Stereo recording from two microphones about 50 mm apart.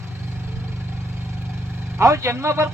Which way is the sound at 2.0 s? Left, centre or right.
Right.